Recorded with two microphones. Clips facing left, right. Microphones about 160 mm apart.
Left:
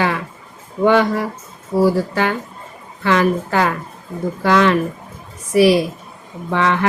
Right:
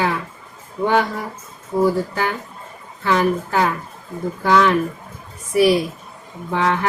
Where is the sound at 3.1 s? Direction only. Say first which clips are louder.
Left 2 dB; 90° left.